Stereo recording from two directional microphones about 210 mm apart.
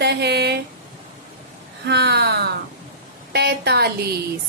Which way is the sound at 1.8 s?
50° right (ahead or behind).